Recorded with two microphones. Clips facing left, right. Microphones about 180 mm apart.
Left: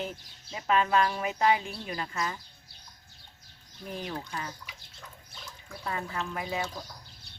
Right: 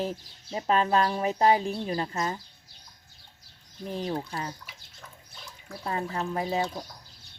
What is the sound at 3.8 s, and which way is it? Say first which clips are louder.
Speech: right 5 dB; 30° right (ahead or behind).